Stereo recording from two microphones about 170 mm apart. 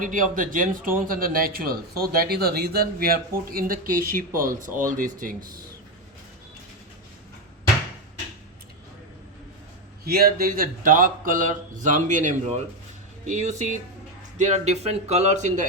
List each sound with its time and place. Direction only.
0.0 s a man's voice: 50° right (ahead or behind)
10.0 s speech: 65° right (ahead or behind); by 15.6 s 45° right (ahead or behind)